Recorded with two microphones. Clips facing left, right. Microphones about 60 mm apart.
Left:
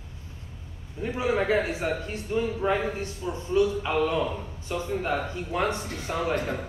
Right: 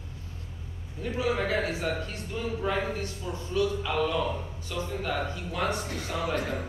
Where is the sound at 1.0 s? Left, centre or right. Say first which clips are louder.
Left 3 dB; left.